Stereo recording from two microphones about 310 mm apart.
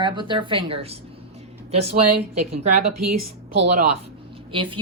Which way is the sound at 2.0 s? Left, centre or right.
Right.